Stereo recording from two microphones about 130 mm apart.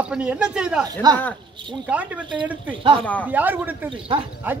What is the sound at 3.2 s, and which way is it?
Speech, 15° right (ahead or behind).